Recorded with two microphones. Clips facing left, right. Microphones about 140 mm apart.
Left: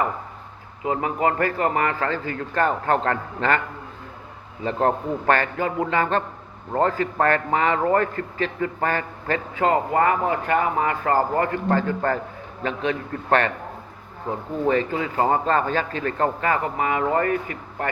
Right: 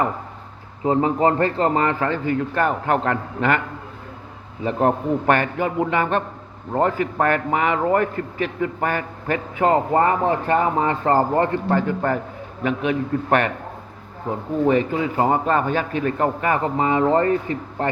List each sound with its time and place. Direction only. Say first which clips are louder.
0.9 s a man's voice: right 5 dB; 30° right (ahead or behind); by 3.6 s 10° right (ahead or behind)
4.6 s a man's voice: right 2 dB; 10° right (ahead or behind)
9.7 s speech: right 2 dB; 30° right (ahead or behind)
11.7 s a man's voice: right 1 dB; 15° right (ahead or behind)
14.6 s a man's voice: right 3 dB; 15° right (ahead or behind); by 17.8 s 30° right (ahead or behind)